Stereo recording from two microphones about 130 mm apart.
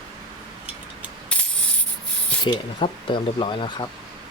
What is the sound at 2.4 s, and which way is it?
Speech, 35° left (ahead or behind).